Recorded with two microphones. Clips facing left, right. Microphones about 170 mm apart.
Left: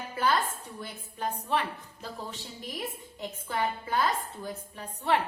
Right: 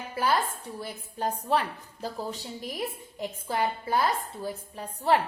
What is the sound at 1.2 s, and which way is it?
A woman's voice, 40° right (ahead or behind).